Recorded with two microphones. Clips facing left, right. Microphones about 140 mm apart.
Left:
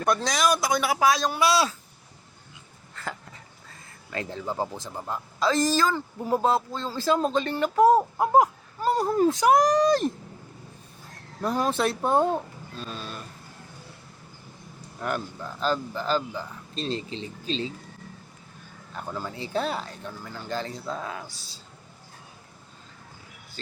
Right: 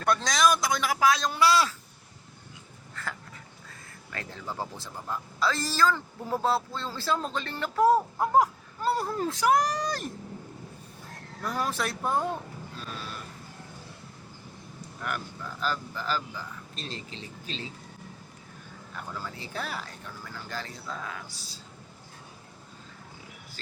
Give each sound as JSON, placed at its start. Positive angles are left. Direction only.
{"t": 0.0, "sound": "speech", "side_deg": 15}
{"t": 2.9, "sound": "a sound", "side_deg": 25}
{"t": 4.1, "sound": "speech", "side_deg": 20}
{"t": 11.4, "sound": "speech", "side_deg": 25}
{"t": 12.9, "sound": "vehicle", "side_deg": 25}
{"t": 15.6, "sound": "speech", "side_deg": 30}
{"t": 18.9, "sound": "speech", "side_deg": 25}